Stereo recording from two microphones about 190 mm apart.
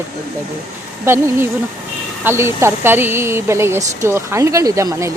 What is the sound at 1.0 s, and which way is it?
A woman's voice, 10° right (ahead or behind).